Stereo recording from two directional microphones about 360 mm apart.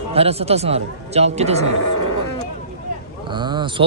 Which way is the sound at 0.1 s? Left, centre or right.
Centre.